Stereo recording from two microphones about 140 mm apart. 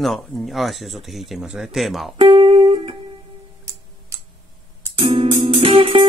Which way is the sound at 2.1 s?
40° right (ahead or behind).